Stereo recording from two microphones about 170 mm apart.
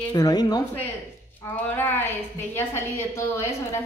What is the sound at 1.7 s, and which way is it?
A woman's voice, 10° left (ahead or behind).